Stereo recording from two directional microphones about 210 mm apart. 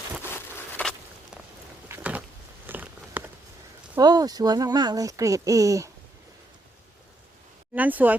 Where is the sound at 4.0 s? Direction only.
20° right (ahead or behind).